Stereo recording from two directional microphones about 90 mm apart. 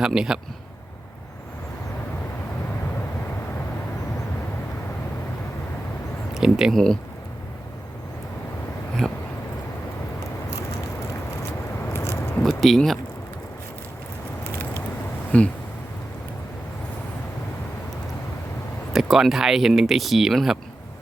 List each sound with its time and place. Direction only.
0.0 s speech: 5° right (ahead or behind)
6.3 s speech: 5° right (ahead or behind)
9.0 s speech: 5° left (ahead or behind)
11.9 s biting: 30° left (ahead or behind)
12.4 s a sound: centre (ahead or behind)
15.3 s speech: 15° left (ahead or behind)
18.9 s speech: centre (ahead or behind)